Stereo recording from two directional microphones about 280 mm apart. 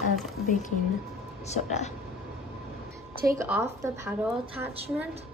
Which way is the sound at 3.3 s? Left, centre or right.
Centre.